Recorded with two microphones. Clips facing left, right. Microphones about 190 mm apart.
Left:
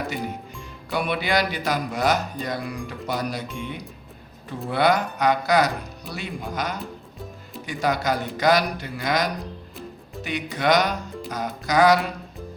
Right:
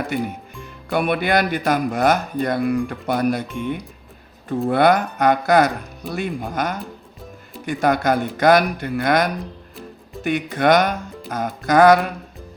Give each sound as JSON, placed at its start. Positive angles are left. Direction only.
{"t": 0.9, "sound": "speech", "side_deg": -55}